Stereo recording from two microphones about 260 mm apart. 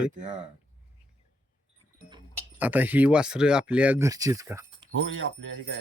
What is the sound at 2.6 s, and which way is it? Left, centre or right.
Speech, centre.